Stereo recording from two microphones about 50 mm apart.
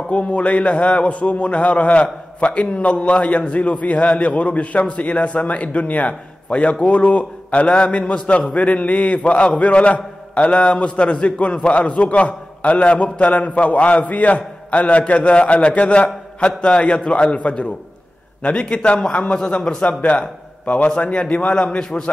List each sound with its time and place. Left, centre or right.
0.1 s a man's voice: left